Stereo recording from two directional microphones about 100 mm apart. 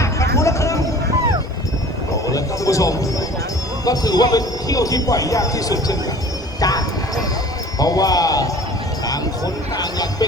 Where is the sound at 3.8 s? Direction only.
40° left (ahead or behind).